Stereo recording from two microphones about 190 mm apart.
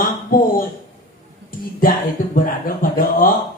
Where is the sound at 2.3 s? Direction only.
50° left (ahead or behind).